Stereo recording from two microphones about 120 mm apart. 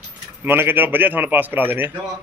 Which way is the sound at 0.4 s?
15° right (ahead or behind).